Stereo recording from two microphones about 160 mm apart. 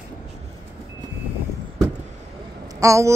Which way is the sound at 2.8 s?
20° right (ahead or behind).